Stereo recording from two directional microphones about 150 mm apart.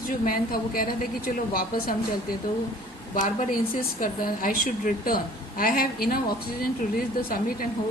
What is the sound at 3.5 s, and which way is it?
A woman's voice, 65° left (ahead or behind).